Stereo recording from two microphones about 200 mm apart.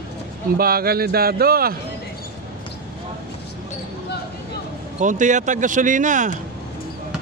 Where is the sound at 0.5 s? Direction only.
50° right (ahead or behind).